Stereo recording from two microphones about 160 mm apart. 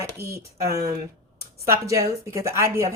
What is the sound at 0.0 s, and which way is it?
A woman's voice, 20° right (ahead or behind).